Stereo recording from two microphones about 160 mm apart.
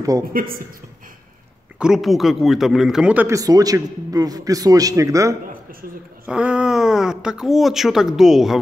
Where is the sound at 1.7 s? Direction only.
5° right (ahead or behind).